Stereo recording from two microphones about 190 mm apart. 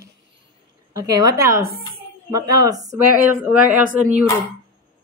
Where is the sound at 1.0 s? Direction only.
20° right (ahead or behind).